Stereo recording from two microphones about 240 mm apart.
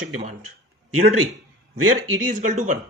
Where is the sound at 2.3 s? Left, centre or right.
Right.